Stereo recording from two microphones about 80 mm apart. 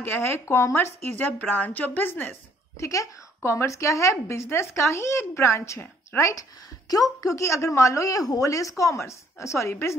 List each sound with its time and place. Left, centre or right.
0.0 s speech: left
2.8 s a woman's voice: left